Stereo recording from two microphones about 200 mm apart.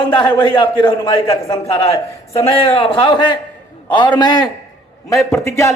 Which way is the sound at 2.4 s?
30° left (ahead or behind).